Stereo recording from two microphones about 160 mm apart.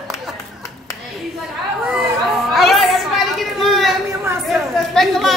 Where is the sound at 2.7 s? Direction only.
Centre (ahead or behind).